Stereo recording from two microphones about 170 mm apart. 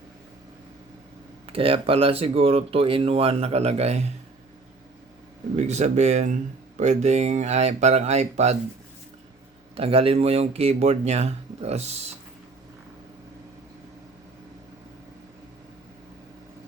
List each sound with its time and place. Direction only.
1.5 s speech: 35° right (ahead or behind)
5.5 s speech: 40° right (ahead or behind)
9.7 s speech: 35° right (ahead or behind)